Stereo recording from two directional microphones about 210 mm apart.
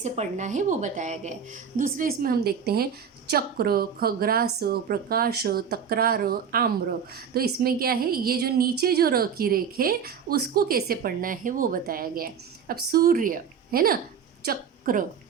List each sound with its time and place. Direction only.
0.0 s a woman's voice: 35° right (ahead or behind)